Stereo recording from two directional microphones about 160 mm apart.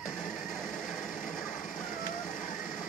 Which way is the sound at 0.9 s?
55° left (ahead or behind).